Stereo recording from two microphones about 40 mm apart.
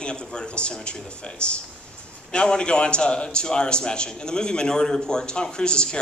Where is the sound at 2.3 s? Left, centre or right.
Left.